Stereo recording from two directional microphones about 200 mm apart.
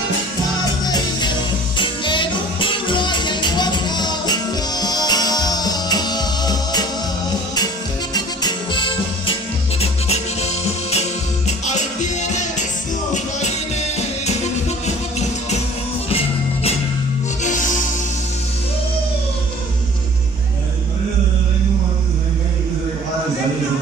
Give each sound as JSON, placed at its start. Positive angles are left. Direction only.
{"t": 1.8, "sound": "music", "side_deg": 25}
{"t": 8.1, "sound": "music", "side_deg": 20}
{"t": 17.4, "sound": "music", "side_deg": 40}